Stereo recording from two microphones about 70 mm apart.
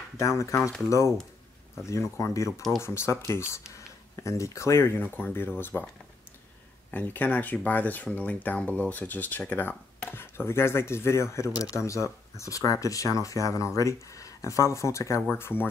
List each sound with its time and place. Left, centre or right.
0.2 s speech: left
6.9 s speech: left
15.3 s speech: left